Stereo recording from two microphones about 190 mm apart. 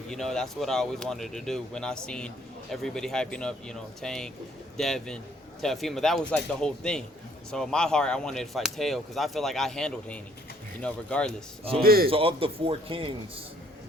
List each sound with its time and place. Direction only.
0.1 s speech: centre (ahead or behind)
11.8 s a man's voice: 50° right (ahead or behind)
12.1 s speech: 30° right (ahead or behind)